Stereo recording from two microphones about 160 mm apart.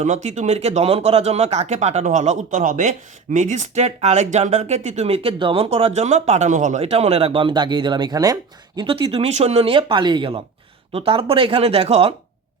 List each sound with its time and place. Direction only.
0.0 s speech: 45° right (ahead or behind)